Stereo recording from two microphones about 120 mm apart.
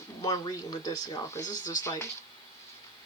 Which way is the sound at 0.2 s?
35° left (ahead or behind).